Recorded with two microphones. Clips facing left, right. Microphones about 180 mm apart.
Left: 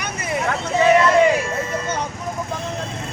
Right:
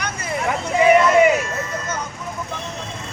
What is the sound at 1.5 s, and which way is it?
Vehicle, 30° left (ahead or behind).